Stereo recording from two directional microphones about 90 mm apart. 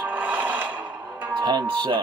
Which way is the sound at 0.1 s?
20° right (ahead or behind).